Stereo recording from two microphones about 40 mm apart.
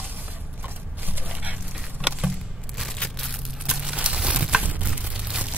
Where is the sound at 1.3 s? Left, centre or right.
Right.